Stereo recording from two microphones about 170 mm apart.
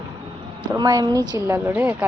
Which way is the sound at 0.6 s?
25° right (ahead or behind).